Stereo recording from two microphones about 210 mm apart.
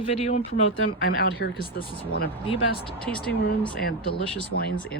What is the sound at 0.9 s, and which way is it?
Speech, 55° left (ahead or behind).